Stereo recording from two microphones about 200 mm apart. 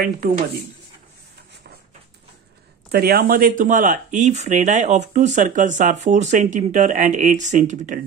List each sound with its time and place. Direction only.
2.9 s speech: 50° right (ahead or behind)